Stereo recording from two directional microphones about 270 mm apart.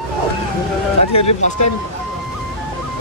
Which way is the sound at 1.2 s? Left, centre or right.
Left.